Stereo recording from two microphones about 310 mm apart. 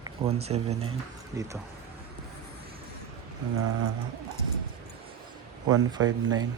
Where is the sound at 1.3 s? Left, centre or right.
Centre.